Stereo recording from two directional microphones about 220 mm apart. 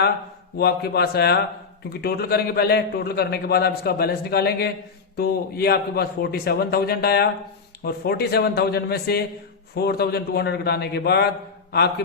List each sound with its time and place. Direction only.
0.5 s a man's voice: 45° left (ahead or behind)